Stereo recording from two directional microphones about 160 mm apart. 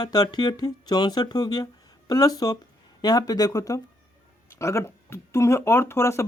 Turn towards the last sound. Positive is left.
turn(degrees=15)  # may be behind; listen again after turning